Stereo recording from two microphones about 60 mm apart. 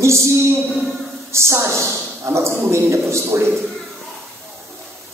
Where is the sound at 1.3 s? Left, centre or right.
Right.